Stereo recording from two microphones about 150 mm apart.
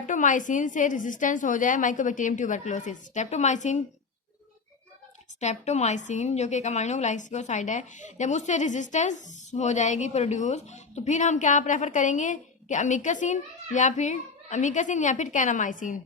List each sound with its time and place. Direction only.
0.1 s a woman's voice: 60° left (ahead or behind)
5.4 s a woman's voice: 50° left (ahead or behind)